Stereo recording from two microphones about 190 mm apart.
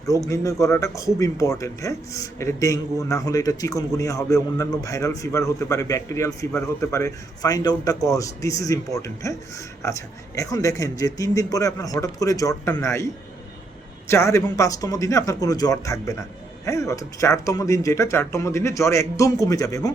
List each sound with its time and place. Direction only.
0.0 s speech: 15° left (ahead or behind)
14.1 s speech: 15° left (ahead or behind)